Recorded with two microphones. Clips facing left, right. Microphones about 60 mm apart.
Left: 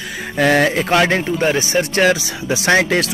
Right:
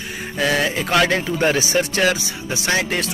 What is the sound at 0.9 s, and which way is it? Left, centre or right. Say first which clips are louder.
Speech: left 3 dB; left.